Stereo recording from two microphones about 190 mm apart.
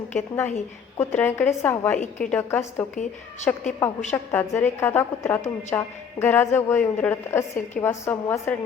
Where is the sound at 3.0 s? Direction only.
40° left (ahead or behind).